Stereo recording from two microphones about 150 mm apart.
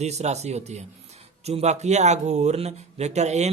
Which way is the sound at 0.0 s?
45° right (ahead or behind).